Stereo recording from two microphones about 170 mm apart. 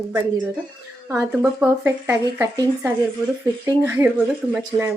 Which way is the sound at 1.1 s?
15° right (ahead or behind).